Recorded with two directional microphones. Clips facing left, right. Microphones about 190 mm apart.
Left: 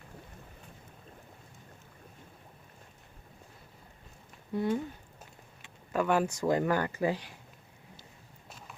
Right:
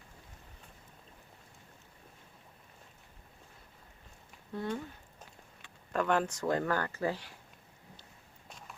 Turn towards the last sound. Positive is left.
turn(degrees=15)  # may be behind; listen again after turning